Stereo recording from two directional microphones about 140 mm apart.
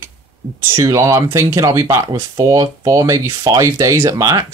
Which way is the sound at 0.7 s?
20° right (ahead or behind).